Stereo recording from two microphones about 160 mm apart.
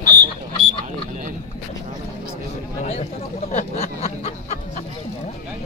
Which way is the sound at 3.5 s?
45° left (ahead or behind).